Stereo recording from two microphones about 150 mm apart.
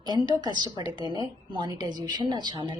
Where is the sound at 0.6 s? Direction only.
30° right (ahead or behind).